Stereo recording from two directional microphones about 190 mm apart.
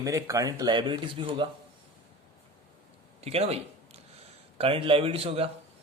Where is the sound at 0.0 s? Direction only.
15° right (ahead or behind).